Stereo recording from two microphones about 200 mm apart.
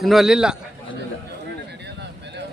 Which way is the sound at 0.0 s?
Centre (ahead or behind).